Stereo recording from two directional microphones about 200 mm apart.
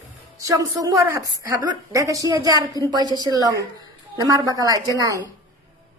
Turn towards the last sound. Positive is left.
turn(degrees=-15)  # may be behind; listen again after turning